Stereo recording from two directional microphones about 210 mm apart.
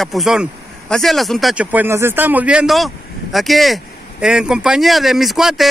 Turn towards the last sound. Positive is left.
turn(degrees=0)  # may be behind; listen again after turning